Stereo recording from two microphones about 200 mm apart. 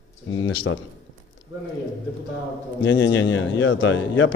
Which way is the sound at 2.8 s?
65° left (ahead or behind).